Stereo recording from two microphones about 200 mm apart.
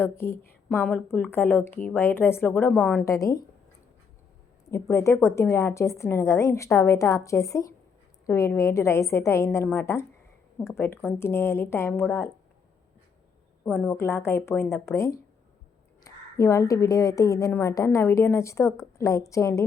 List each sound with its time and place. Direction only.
0.0 s a woman's voice: 10° left (ahead or behind)
4.7 s a woman's voice: 15° left (ahead or behind)
13.7 s a woman's voice: 10° left (ahead or behind)